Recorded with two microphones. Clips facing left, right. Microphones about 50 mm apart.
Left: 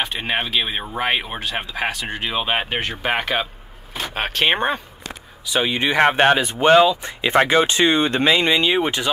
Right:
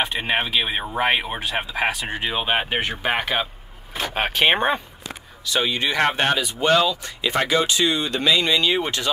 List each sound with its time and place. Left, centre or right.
0.2 s speech: centre
5.5 s speech: centre